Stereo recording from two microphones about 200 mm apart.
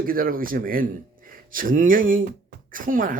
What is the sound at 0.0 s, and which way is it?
Speech, 45° right (ahead or behind).